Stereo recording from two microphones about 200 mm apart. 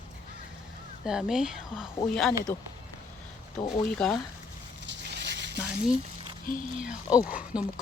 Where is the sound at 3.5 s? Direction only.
30° left (ahead or behind).